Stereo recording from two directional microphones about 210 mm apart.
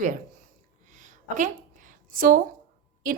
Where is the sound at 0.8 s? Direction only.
35° right (ahead or behind).